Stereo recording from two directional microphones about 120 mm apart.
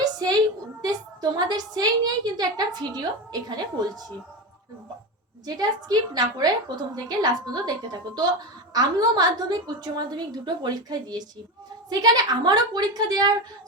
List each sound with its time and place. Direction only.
0.0 s a sound: 35° right (ahead or behind)
0.8 s a woman's voice: 35° right (ahead or behind)
5.5 s a woman's voice: 35° right (ahead or behind)